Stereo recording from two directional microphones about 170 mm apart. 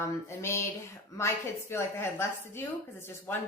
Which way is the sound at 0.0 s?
15° left (ahead or behind).